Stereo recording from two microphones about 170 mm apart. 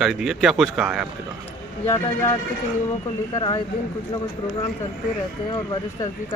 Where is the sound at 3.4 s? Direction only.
25° left (ahead or behind).